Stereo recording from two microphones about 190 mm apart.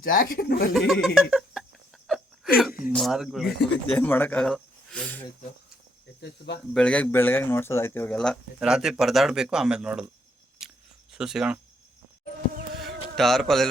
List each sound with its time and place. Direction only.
0.0 s speech: 50° left (ahead or behind)
0.7 s speech: centre (ahead or behind)
1.0 s a sound: centre (ahead or behind)
2.6 s speech: centre (ahead or behind)
6.2 s speech: 65° left (ahead or behind)
6.7 s speech: 5° left (ahead or behind)
11.1 s speech: 5° right (ahead or behind)
13.1 s speech: centre (ahead or behind)